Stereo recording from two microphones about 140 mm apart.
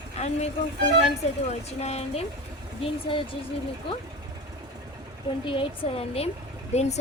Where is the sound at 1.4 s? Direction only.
50° left (ahead or behind).